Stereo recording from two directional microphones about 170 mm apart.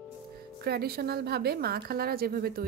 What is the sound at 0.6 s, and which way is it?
Speech, 70° right (ahead or behind).